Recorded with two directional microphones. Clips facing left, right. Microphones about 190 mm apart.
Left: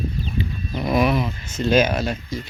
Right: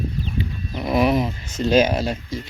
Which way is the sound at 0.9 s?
35° right (ahead or behind).